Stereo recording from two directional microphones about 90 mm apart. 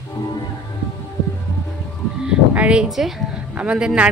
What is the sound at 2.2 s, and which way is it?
Speech, 15° right (ahead or behind).